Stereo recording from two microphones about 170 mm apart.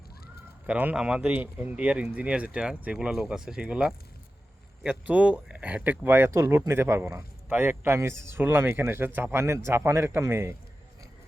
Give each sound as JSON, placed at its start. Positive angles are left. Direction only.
{"t": 0.7, "sound": "speech", "side_deg": -10}